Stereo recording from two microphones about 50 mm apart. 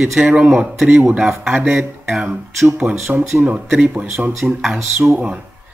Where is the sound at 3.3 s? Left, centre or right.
Right.